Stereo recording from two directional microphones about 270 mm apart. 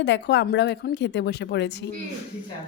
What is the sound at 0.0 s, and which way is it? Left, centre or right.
A woman's voice, left.